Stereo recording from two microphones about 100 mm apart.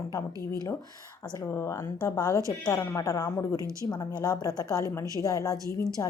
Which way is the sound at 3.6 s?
35° right (ahead or behind).